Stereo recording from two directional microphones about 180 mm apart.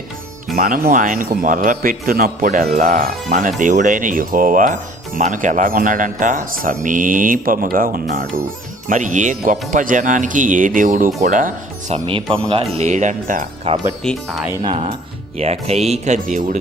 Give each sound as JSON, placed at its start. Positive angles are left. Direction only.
{"t": 0.5, "sound": "speech", "side_deg": -50}
{"t": 12.0, "sound": "speech", "side_deg": -30}
{"t": 12.7, "sound": "speech", "side_deg": -40}
{"t": 14.0, "sound": "speech", "side_deg": 0}
{"t": 14.6, "sound": "speech", "side_deg": -30}